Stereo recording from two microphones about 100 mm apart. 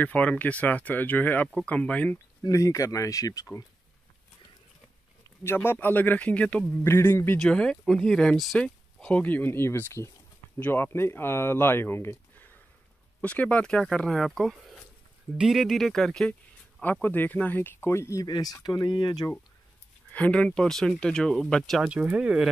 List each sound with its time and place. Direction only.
0.0 s speech: 15° left (ahead or behind)
2.4 s speech: 30° left (ahead or behind)
5.4 s speech: 25° left (ahead or behind)
7.3 s speech: 5° left (ahead or behind)
16.8 s speech: 15° left (ahead or behind)
18.2 s speech: 40° left (ahead or behind)
20.1 s speech: 10° left (ahead or behind)
22.1 s speech: 10° right (ahead or behind)